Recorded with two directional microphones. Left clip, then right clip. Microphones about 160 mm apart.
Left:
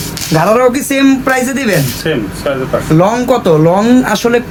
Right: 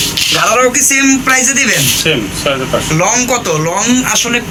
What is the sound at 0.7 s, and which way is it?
Speech, 65° left (ahead or behind).